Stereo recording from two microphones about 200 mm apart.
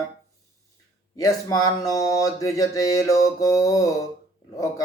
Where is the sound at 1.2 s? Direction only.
15° left (ahead or behind).